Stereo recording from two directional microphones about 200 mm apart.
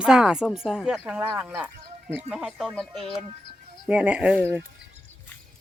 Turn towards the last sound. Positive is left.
turn(degrees=-5)  # may be behind; listen again after turning